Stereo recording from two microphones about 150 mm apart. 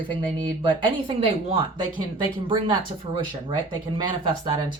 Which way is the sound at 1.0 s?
35° right (ahead or behind).